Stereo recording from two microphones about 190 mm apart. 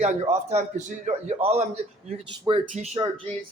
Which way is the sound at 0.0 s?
35° right (ahead or behind).